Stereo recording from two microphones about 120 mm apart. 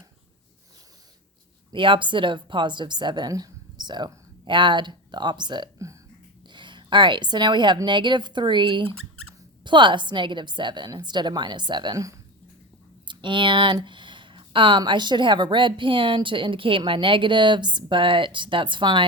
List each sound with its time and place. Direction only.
1.7 s a woman's voice: 45° right (ahead or behind)